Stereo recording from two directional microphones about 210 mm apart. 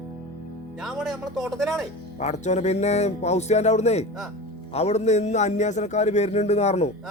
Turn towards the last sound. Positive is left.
turn(degrees=30)  # may be behind; listen again after turning